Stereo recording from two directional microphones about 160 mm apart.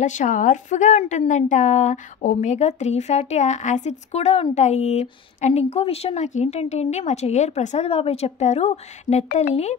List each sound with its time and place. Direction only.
0.0 s a woman's voice: 50° left (ahead or behind)